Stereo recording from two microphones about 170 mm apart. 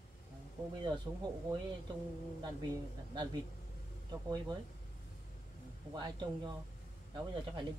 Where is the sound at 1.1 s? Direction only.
15° right (ahead or behind).